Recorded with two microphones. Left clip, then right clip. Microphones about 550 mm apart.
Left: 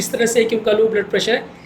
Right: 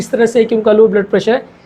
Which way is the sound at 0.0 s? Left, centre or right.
Right.